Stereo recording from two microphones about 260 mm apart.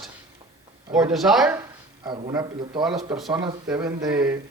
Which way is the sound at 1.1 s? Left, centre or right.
Centre.